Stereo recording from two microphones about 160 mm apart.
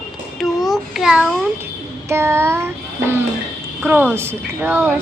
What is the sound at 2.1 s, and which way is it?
Child singing, 15° right (ahead or behind).